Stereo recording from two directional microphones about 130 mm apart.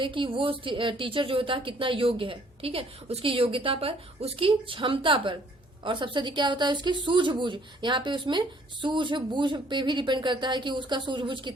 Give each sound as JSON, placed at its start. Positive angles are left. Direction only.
{"t": 0.0, "sound": "a woman's voice", "side_deg": -40}